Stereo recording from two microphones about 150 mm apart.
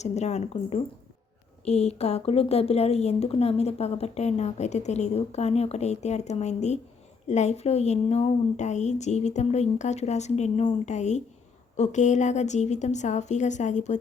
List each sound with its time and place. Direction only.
0.0 s a woman's voice: 50° left (ahead or behind)